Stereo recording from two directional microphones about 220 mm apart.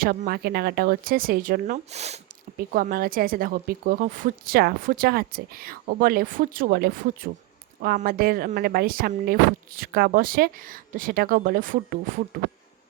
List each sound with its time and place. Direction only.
0.0 s a woman's voice: 40° right (ahead or behind)
2.6 s a woman's voice: 40° right (ahead or behind)